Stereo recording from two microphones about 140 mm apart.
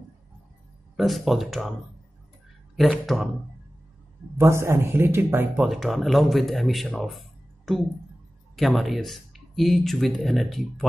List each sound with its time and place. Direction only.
0.9 s speech: centre (ahead or behind)
2.7 s speech: centre (ahead or behind)
4.4 s a man's voice: 20° right (ahead or behind)
5.6 s speech: centre (ahead or behind)